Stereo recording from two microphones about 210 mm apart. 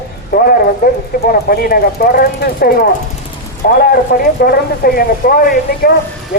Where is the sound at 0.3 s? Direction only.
45° left (ahead or behind).